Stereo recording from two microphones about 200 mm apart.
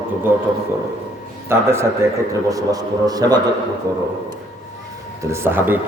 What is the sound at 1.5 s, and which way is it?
A man's voice, 15° right (ahead or behind).